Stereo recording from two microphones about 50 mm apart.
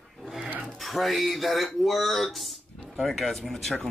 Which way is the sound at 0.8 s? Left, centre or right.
Centre.